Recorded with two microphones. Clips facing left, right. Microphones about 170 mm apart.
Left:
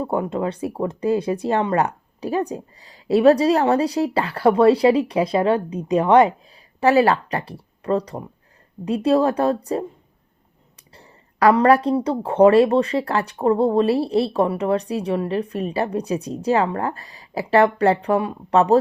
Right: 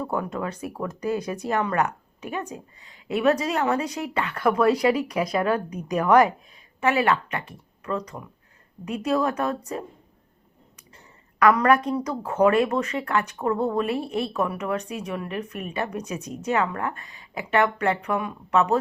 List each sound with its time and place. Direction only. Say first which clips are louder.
0.0 s a woman's voice: left 5 dB; 25° left (ahead or behind)
10.9 s a woman's voice: left 4 dB; 35° left (ahead or behind)